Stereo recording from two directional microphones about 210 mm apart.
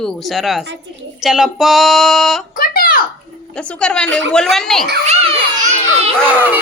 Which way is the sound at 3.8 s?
5° left (ahead or behind).